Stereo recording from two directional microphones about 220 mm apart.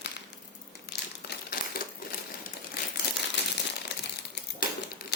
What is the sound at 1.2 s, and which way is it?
Crumpling, 50° left (ahead or behind).